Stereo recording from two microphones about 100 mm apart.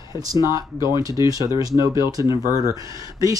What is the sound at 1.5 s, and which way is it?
Speech, 35° right (ahead or behind).